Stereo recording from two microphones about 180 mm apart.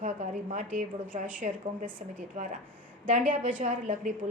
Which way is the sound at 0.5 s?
45° right (ahead or behind).